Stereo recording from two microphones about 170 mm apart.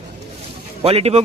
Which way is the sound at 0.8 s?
35° right (ahead or behind).